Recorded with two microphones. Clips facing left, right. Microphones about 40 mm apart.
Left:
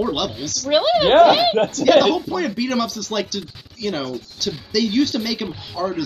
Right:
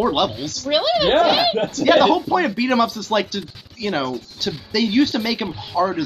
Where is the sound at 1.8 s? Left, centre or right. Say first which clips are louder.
Right 1 dB; right.